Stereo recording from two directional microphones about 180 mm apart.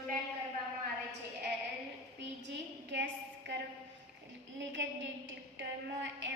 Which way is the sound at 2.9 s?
75° right (ahead or behind).